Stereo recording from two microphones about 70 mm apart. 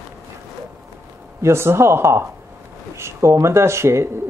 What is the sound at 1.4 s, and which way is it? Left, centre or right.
Speech, right.